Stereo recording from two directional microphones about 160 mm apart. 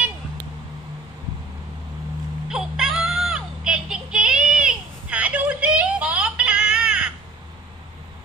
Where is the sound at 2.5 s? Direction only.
Centre (ahead or behind).